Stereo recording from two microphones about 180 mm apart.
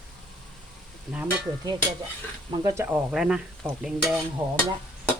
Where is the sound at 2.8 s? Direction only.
5° right (ahead or behind).